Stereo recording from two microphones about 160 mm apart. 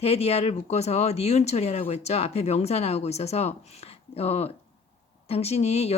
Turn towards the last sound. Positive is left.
turn(degrees=40)  # may be behind; listen again after turning